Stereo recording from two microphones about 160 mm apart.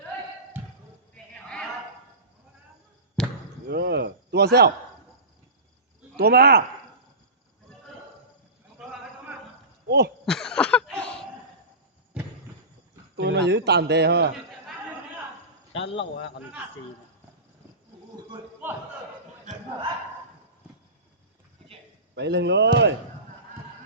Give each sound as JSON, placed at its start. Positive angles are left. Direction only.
{"t": 1.1, "sound": "a sound", "side_deg": 5}
{"t": 3.2, "sound": "basketball bounce", "side_deg": 5}
{"t": 3.7, "sound": "cricket", "side_deg": -90}
{"t": 6.1, "sound": "speech", "side_deg": -80}
{"t": 9.8, "sound": "speech", "side_deg": -90}
{"t": 10.2, "sound": "a sound", "side_deg": 5}
{"t": 13.1, "sound": "speech", "side_deg": -90}
{"t": 15.7, "sound": "a man's voice", "side_deg": 35}
{"t": 18.6, "sound": "a sound", "side_deg": -10}
{"t": 22.1, "sound": "speech", "side_deg": -90}